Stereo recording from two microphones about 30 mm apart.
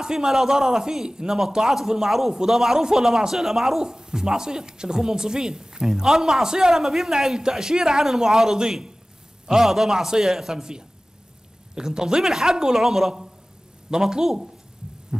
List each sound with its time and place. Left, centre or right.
0.0 s a woman's voice: right
1.3 s a man's voice: centre
3.8 s a woman's voice: right
6.4 s a woman's voice: right
6.7 s a man's voice: centre
7.3 s a woman's voice: right